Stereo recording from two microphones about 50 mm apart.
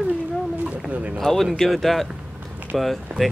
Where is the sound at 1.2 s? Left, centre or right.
Centre.